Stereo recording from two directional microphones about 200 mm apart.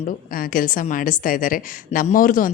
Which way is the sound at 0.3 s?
45° left (ahead or behind).